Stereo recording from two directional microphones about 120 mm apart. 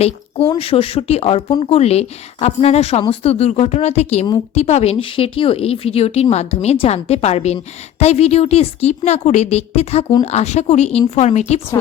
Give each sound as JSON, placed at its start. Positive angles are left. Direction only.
{"t": 0.0, "sound": "a woman's voice", "side_deg": 50}